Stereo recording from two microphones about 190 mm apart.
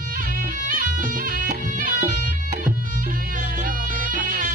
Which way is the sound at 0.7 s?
45° right (ahead or behind).